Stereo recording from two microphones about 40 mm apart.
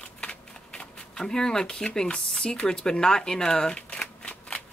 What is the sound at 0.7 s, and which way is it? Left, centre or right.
Speech, centre.